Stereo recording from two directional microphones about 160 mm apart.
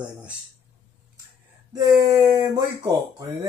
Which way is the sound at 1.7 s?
20° right (ahead or behind).